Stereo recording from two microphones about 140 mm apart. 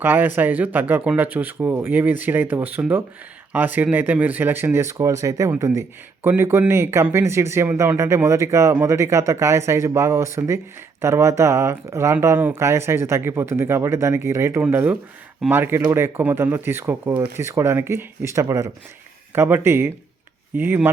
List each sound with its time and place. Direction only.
0.0 s speech: 15° right (ahead or behind)